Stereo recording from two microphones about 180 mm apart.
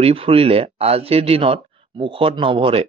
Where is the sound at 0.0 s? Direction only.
30° right (ahead or behind).